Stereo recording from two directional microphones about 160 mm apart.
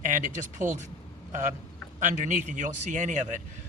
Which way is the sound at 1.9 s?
50° right (ahead or behind).